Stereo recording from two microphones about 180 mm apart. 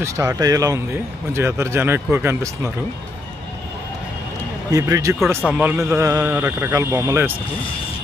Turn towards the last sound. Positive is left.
turn(degrees=-15)  # may be behind; listen again after turning